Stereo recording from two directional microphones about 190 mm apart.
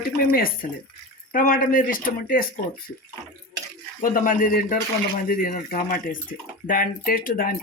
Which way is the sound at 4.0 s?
45° left (ahead or behind).